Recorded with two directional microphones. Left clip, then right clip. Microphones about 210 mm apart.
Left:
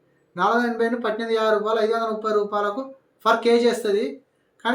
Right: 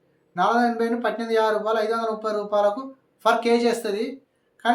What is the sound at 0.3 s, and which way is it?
Speech, 15° right (ahead or behind).